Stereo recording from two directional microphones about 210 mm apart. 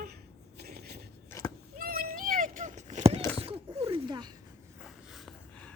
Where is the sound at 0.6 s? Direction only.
50° right (ahead or behind).